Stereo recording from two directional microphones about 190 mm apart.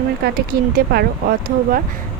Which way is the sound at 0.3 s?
55° right (ahead or behind).